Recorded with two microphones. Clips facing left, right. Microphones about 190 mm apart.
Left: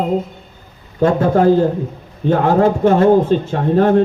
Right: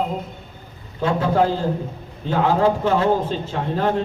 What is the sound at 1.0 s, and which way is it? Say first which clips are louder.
A man's voice: left 6 dB; 50° left (ahead or behind).